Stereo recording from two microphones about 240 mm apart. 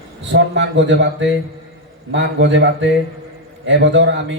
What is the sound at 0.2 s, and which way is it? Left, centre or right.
A man's voice, right.